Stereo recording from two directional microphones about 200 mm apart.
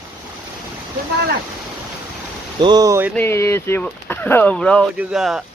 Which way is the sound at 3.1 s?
15° left (ahead or behind).